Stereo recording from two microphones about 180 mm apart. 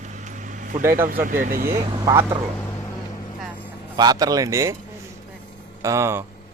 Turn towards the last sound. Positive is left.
turn(degrees=-15)  # may be behind; listen again after turning